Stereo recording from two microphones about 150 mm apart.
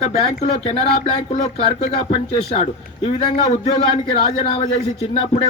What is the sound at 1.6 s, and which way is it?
A man's voice, 35° left (ahead or behind).